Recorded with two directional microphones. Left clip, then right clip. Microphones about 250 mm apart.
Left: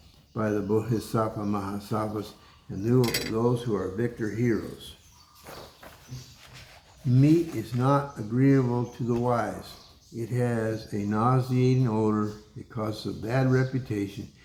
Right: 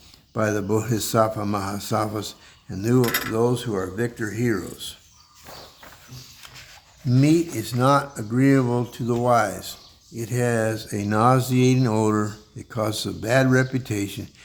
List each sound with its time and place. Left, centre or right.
0.3 s speech: right
7.1 s speech: right